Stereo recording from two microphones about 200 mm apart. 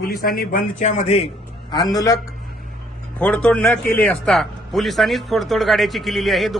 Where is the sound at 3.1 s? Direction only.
5° left (ahead or behind).